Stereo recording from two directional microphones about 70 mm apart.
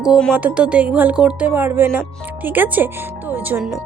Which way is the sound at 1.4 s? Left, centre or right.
Right.